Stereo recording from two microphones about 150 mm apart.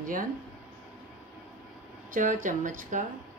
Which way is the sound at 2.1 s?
55° right (ahead or behind).